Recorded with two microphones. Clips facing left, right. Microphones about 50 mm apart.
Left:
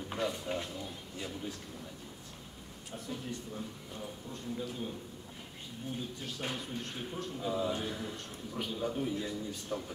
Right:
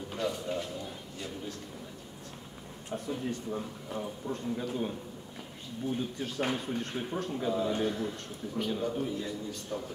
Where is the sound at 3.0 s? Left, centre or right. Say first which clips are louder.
Right 5 dB; right.